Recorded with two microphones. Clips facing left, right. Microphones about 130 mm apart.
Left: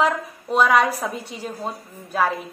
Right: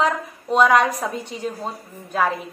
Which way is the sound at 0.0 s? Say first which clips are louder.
Left 1 dB; 5° left (ahead or behind).